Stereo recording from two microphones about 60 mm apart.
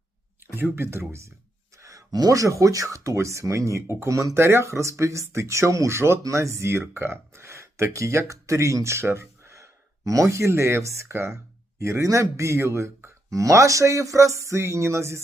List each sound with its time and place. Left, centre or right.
0.5 s speech: right
1.7 s speech: right
4.1 s speech: right
4.4 s speech: right
13.3 s speech: right